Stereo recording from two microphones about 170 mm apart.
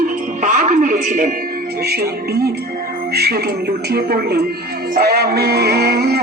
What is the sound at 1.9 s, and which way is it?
Speech, 70° right (ahead or behind).